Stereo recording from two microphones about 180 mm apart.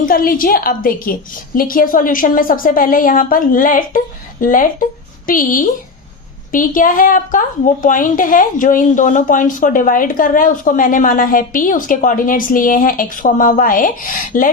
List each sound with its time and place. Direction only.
0.0 s a woman's voice: 50° left (ahead or behind)